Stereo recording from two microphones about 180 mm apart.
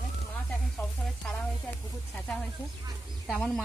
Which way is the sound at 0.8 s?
15° left (ahead or behind).